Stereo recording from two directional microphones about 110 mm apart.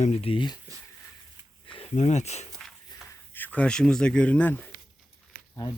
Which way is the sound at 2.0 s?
90° left.